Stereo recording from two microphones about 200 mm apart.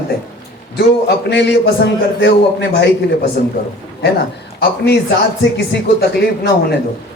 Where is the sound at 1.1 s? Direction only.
60° left (ahead or behind).